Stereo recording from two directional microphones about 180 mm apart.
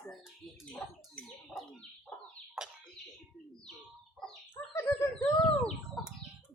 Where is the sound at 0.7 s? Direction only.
5° left (ahead or behind).